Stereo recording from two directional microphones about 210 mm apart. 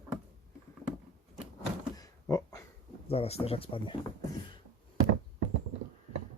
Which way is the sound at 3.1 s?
30° left (ahead or behind).